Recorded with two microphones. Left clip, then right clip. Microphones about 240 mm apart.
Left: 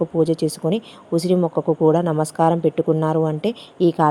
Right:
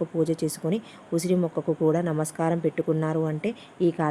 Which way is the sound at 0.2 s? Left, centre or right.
Centre.